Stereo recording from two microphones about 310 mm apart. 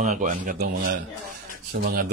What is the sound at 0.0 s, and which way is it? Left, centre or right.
Speech, right.